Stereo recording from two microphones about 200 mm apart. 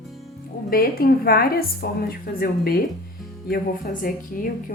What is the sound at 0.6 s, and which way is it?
A woman's voice, 45° left (ahead or behind).